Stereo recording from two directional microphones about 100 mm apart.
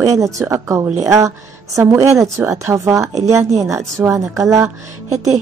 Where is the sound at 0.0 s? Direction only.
35° right (ahead or behind).